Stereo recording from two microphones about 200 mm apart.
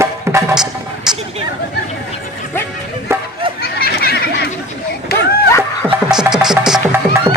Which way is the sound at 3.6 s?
50° left (ahead or behind).